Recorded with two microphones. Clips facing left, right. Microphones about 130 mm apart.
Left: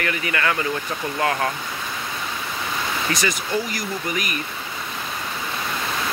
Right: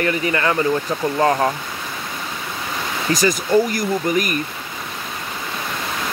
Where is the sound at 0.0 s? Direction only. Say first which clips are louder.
Right 5 dB; 30° right (ahead or behind).